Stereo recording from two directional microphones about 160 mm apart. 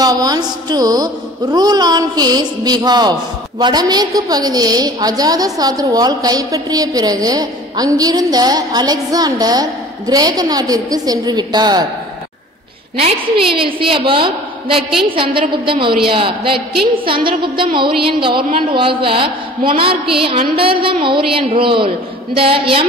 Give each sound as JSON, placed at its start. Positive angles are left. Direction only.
{"t": 0.0, "sound": "speech", "side_deg": -25}
{"t": 12.9, "sound": "a woman's voice", "side_deg": -35}
{"t": 17.0, "sound": "a woman's voice", "side_deg": -30}